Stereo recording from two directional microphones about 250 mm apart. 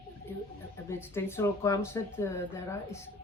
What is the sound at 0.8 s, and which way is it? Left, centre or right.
Speech, centre.